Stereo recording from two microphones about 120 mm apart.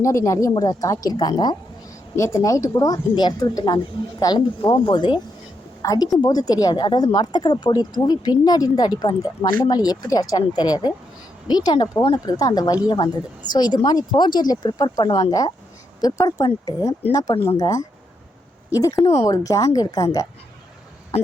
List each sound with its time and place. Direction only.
0.0 s speech: 25° left (ahead or behind)
2.1 s speech: 25° left (ahead or behind); by 5.2 s 45° left (ahead or behind)
5.8 s a woman's voice: 30° left (ahead or behind)
19.0 s speech: 55° left (ahead or behind)
19.3 s speech: 30° left (ahead or behind)